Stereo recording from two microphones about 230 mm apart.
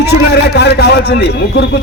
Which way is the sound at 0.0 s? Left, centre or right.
Left.